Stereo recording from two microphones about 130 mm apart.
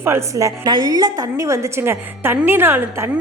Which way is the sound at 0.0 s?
20° right (ahead or behind).